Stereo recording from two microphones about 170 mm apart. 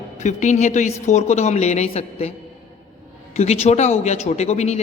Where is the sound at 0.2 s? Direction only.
45° left (ahead or behind).